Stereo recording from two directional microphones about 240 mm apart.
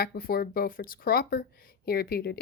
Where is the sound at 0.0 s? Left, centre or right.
Left.